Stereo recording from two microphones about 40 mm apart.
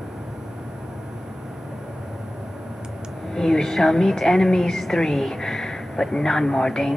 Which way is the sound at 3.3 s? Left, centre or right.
Centre.